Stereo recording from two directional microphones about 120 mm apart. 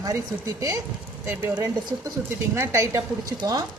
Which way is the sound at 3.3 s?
35° right (ahead or behind).